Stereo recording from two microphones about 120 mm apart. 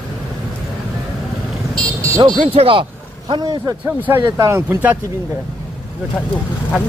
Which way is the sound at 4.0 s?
20° right (ahead or behind).